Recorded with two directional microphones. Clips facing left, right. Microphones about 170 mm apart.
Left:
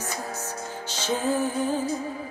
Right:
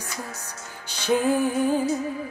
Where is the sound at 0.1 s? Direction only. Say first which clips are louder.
Even; 40° left (ahead or behind).